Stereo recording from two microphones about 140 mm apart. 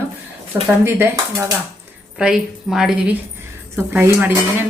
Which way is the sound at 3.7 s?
15° right (ahead or behind).